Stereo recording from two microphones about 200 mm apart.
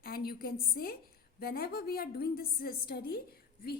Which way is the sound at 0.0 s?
50° left (ahead or behind).